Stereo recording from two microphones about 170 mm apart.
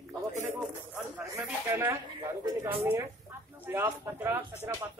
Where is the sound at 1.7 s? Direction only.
15° right (ahead or behind).